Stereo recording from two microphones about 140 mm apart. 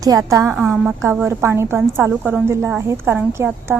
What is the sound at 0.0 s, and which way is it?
A woman's voice, 25° right (ahead or behind).